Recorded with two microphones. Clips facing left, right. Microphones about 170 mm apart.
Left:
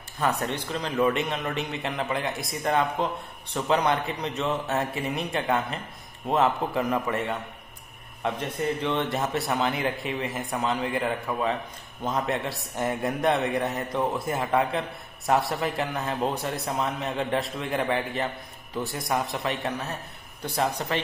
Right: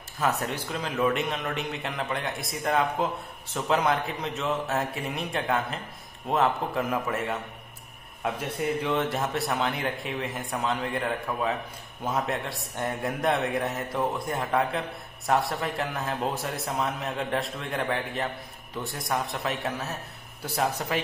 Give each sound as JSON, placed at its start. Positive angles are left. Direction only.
{"t": 0.2, "sound": "a man's voice", "side_deg": 0}